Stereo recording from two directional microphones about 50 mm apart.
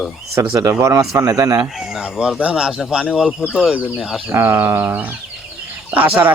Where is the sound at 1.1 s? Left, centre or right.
Right.